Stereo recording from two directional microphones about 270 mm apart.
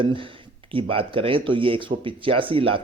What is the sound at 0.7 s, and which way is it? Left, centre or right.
Speech, centre.